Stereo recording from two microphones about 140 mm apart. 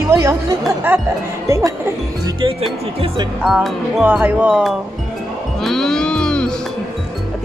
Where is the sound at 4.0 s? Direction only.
10° right (ahead or behind).